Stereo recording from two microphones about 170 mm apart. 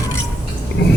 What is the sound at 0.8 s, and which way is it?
Speech, 85° left.